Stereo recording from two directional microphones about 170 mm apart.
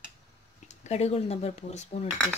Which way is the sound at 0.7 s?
40° left (ahead or behind).